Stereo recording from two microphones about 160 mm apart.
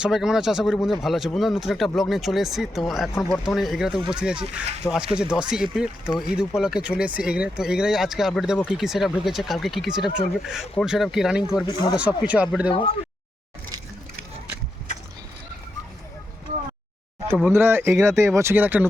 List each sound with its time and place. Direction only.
0.0 s speech: 5° right (ahead or behind)
11.6 s speech: 25° left (ahead or behind)
11.9 s speech: 10° right (ahead or behind)
17.5 s speech: 15° right (ahead or behind)